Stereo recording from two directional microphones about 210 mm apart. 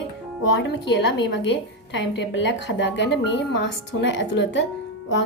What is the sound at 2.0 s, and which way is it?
Speech, 60° left (ahead or behind).